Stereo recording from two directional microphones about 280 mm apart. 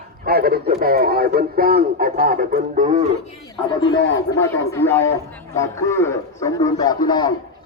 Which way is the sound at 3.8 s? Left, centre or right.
Centre.